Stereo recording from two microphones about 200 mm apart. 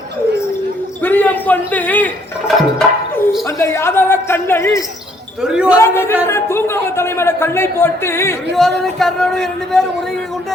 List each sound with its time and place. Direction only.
1.0 s a man's voice: 10° left (ahead or behind)
2.6 s music: centre (ahead or behind)
3.4 s a man's voice: 15° left (ahead or behind)
5.4 s speech: 5° right (ahead or behind)
5.7 s a man's voice: 15° left (ahead or behind)
8.8 s speech: centre (ahead or behind)